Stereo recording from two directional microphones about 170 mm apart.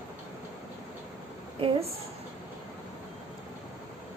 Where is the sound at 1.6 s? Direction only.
35° right (ahead or behind).